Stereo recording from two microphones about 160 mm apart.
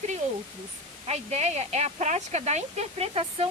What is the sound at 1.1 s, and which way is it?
A woman's voice, 45° right (ahead or behind).